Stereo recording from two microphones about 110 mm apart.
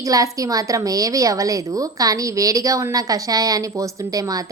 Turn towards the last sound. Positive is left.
turn(degrees=-35)  # may be behind; listen again after turning